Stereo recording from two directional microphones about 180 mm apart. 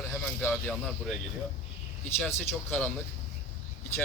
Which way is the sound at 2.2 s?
10° left (ahead or behind).